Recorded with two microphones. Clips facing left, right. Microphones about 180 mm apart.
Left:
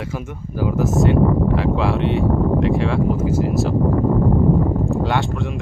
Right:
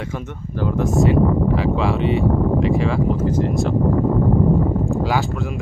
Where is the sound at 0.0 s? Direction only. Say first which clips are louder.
Even; 5° left (ahead or behind).